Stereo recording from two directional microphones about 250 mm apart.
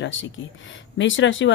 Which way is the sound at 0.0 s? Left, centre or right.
Left.